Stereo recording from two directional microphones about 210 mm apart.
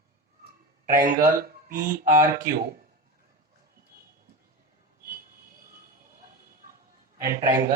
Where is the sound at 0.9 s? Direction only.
40° right (ahead or behind).